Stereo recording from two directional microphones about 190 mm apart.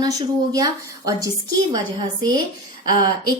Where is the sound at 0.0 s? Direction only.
20° right (ahead or behind).